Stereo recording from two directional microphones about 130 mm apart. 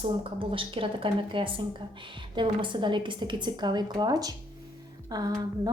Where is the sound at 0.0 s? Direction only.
45° right (ahead or behind).